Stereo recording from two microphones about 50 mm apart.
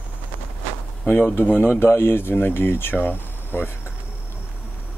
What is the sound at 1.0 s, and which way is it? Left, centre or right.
Speech, left.